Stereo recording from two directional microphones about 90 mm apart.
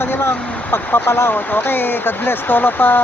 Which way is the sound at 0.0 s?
25° left (ahead or behind).